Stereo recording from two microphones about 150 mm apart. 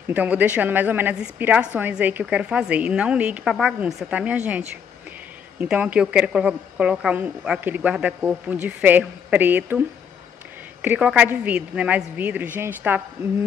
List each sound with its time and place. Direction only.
0.1 s a woman's voice: 10° right (ahead or behind)
5.6 s a woman's voice: 10° right (ahead or behind)